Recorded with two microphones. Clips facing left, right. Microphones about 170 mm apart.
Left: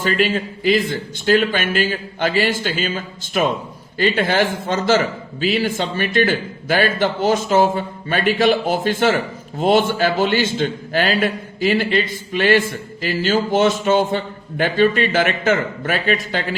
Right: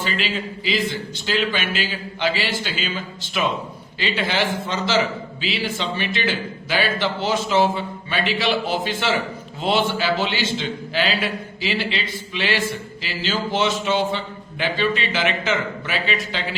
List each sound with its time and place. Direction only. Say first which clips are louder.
0.0 s a man's voice: left 7 dB; 50° left (ahead or behind)